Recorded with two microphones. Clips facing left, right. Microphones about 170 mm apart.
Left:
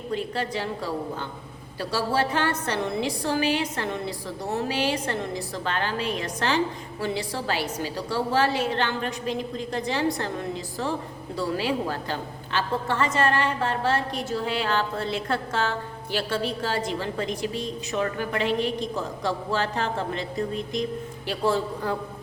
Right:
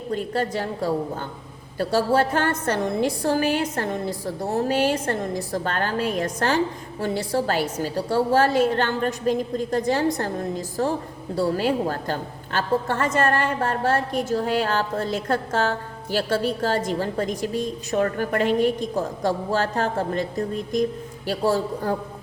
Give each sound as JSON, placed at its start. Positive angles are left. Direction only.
{"t": 0.1, "sound": "a woman's voice", "side_deg": -45}
{"t": 21.2, "sound": "a man's voice", "side_deg": -40}